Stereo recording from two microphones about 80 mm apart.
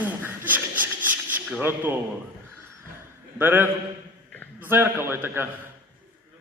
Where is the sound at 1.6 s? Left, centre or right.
Right.